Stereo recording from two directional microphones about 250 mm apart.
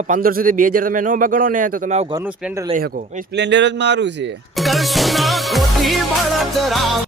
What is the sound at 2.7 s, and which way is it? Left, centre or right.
Speech, right.